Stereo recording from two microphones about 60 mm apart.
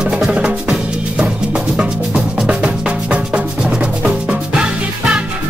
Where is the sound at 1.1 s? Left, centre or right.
Centre.